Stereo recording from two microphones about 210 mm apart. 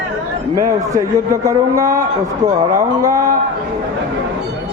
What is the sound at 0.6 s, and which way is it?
A man's voice, 15° right (ahead or behind).